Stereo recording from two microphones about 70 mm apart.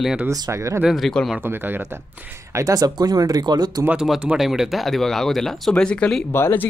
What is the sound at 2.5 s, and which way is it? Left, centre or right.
Speech, right.